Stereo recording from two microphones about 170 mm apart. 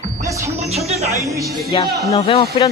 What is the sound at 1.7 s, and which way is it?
Speech, 30° left (ahead or behind).